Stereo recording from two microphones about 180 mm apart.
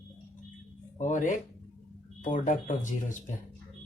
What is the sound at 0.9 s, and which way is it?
Speech, 45° left (ahead or behind).